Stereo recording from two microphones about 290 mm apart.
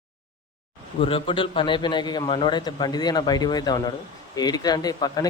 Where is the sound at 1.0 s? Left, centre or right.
Centre.